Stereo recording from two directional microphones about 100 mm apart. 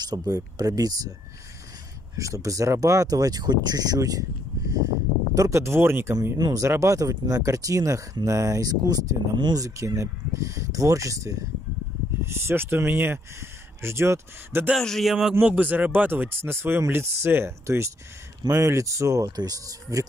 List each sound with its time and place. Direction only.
0.0 s speech: 40° right (ahead or behind)
2.1 s speech: 35° right (ahead or behind)
6.3 s speech: 40° right (ahead or behind)
14.8 s speech: 5° left (ahead or behind)
15.4 s speech: 15° right (ahead or behind); by 20.1 s 35° right (ahead or behind)